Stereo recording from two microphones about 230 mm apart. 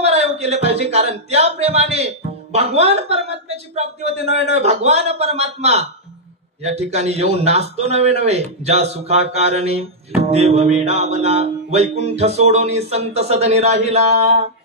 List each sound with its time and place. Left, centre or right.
0.0 s speech: right
6.6 s mantra: right